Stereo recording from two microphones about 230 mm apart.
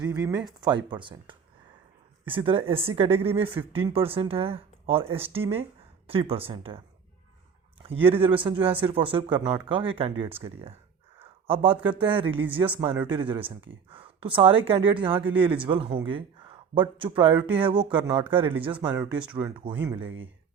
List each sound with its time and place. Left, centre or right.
0.0 s speech: centre
7.8 s a sound: right
8.1 s speech: right
11.2 s a sound: right
12.0 s speech: right
12.5 s speech: centre
13.1 s speech: right
15.2 s speech: centre
15.6 s speech: right
17.9 s speech: centre
19.1 s speech: centre
19.5 s speech: right
19.7 s speech: centre